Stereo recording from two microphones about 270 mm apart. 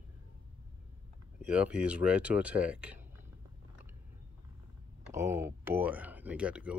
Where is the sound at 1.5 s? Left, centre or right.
Centre.